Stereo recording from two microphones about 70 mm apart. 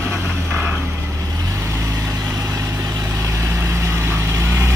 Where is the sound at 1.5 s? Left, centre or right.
Right.